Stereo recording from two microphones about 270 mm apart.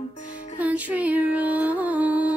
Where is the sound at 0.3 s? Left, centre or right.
Left.